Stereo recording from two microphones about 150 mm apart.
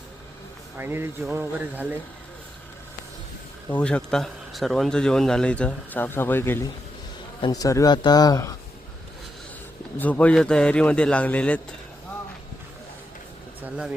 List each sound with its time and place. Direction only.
0.8 s speech: 15° right (ahead or behind)
3.8 s speech: 5° left (ahead or behind); by 8.5 s 25° left (ahead or behind)
10.0 s speech: 10° left (ahead or behind)
13.6 s speech: 10° right (ahead or behind)